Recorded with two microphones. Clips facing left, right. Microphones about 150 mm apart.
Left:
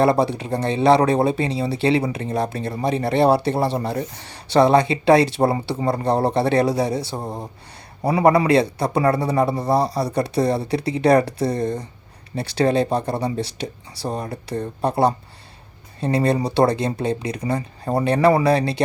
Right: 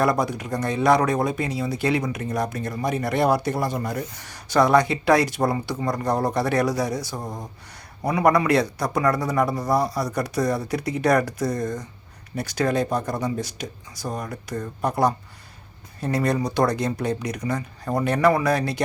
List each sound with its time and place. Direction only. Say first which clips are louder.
0.0 s speech: left 4 dB; 30° left (ahead or behind)